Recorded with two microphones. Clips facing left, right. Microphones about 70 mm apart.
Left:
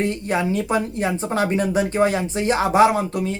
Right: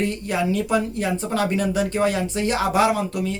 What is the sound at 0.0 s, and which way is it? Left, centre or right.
Speech, left.